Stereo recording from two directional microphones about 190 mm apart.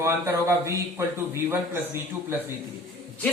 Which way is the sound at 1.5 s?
10° right (ahead or behind).